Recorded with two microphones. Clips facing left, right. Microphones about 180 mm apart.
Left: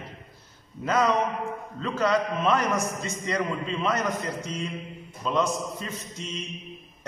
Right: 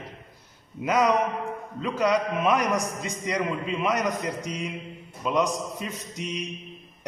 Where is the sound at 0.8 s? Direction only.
15° right (ahead or behind).